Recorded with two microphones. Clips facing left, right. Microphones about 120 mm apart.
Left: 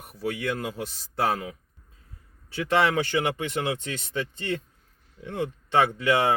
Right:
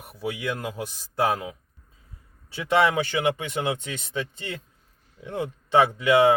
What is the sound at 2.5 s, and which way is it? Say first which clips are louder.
Speech: right 2 dB; 15° right (ahead or behind).